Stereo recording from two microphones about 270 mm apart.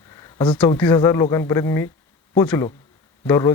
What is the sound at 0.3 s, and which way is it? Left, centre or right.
Speech, centre.